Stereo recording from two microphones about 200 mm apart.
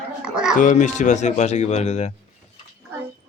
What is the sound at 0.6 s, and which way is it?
Speech, 40° left (ahead or behind).